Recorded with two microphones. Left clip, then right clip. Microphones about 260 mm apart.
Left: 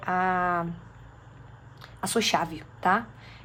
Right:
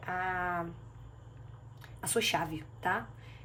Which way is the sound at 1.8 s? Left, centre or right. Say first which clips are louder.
Left 5 dB; centre.